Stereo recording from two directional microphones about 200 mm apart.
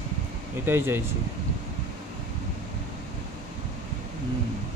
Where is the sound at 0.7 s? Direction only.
10° right (ahead or behind).